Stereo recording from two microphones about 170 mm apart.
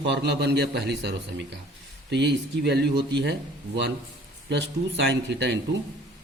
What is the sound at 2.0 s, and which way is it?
A man's voice, 90° right.